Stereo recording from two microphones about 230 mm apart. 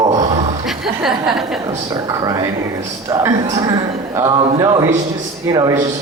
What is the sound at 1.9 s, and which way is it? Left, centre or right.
A man's voice, centre.